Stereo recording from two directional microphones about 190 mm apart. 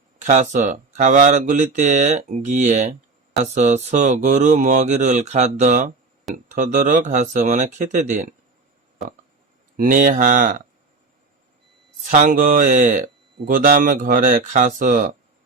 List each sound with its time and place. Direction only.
0.2 s speech: 40° right (ahead or behind)
9.7 s speech: 45° right (ahead or behind)
12.1 s speech: 40° right (ahead or behind)